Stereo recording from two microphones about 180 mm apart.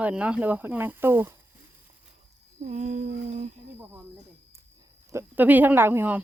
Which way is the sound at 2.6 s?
40° right (ahead or behind).